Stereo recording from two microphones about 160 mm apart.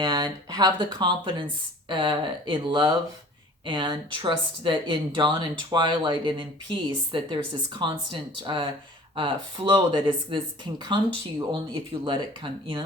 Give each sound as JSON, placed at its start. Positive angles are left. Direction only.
{"t": 0.0, "sound": "speech", "side_deg": -30}